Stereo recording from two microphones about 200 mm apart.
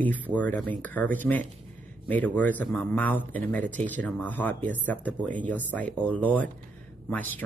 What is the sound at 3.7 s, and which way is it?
Speech, 40° right (ahead or behind).